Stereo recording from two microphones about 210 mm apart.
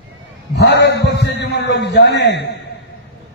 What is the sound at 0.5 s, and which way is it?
A man's voice, 55° left (ahead or behind).